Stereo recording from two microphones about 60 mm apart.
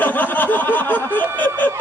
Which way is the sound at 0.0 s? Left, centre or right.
Left.